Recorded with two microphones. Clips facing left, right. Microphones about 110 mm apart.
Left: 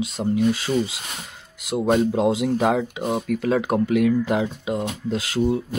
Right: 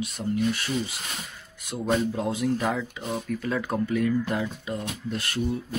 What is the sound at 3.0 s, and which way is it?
Speech, 75° left (ahead or behind).